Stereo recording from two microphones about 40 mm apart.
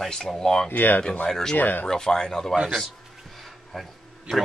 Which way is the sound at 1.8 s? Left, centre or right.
Centre.